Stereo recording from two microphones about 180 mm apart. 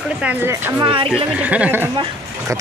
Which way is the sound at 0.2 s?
10° right (ahead or behind).